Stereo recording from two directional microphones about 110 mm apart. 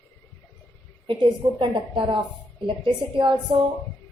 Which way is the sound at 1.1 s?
50° right (ahead or behind).